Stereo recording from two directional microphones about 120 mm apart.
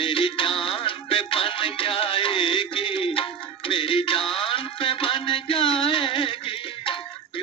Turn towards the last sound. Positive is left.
turn(degrees=50)  # may be behind; listen again after turning